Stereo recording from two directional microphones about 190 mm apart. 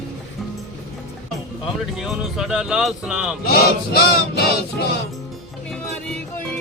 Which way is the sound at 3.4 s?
55° left (ahead or behind).